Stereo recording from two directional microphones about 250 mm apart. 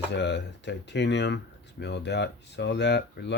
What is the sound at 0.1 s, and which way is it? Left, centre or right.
Speech, left.